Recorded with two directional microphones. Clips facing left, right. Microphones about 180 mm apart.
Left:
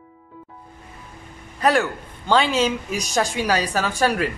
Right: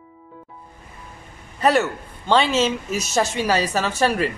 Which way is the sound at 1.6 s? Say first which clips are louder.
Right 1 dB; 5° right (ahead or behind).